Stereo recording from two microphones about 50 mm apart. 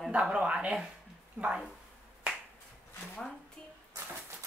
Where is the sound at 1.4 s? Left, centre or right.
Right.